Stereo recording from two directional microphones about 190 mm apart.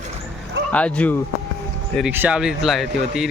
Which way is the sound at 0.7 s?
5° left (ahead or behind).